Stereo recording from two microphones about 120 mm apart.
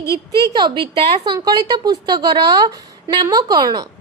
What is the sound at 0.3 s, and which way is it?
Speech, 35° right (ahead or behind).